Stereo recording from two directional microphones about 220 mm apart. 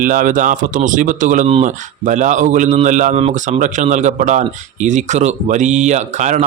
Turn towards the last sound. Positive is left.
turn(degrees=-35)  # may be behind; listen again after turning